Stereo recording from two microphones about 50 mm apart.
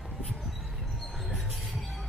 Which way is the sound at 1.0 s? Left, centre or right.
Centre.